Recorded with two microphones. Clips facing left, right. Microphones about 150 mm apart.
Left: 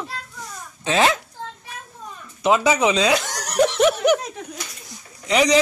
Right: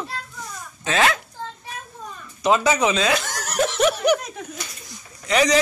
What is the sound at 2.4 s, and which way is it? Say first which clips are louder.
Speech: left 1 dB; 10° left (ahead or behind).